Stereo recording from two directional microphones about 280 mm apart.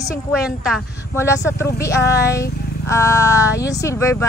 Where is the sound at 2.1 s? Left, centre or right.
Left.